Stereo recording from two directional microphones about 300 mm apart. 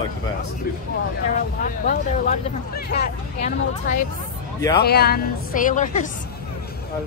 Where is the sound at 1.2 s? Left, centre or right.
Left.